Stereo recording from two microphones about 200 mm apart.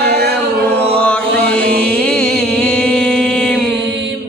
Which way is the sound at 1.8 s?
5° left (ahead or behind).